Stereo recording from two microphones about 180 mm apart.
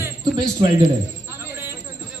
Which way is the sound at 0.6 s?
30° right (ahead or behind).